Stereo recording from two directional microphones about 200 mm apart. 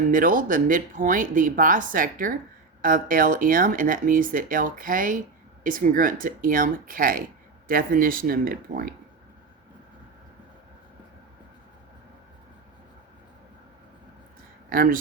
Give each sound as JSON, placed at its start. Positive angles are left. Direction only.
{"t": 0.1, "sound": "speech", "side_deg": -40}
{"t": 14.7, "sound": "speech", "side_deg": -45}